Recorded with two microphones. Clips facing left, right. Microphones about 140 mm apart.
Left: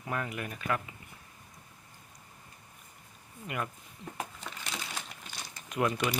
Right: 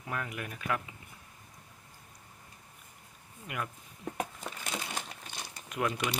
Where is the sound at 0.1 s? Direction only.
Centre (ahead or behind).